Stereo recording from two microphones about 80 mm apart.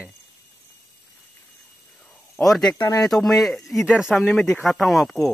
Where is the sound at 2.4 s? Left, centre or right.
Centre.